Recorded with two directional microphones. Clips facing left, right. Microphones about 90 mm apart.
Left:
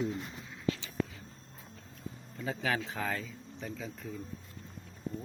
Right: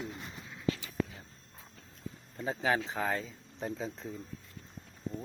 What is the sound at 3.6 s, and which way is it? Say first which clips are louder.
Speech: right 4 dB; 30° right (ahead or behind).